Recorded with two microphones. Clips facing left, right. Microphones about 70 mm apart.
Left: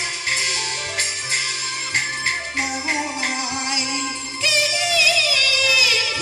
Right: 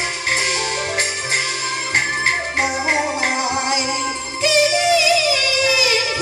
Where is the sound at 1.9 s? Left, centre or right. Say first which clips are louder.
Right 5 dB; right.